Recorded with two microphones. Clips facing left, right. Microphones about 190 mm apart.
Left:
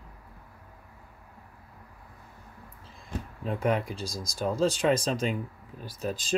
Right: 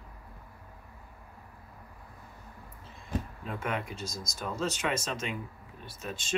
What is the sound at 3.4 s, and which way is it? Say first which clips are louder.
Speech: left 12 dB; 35° left (ahead or behind).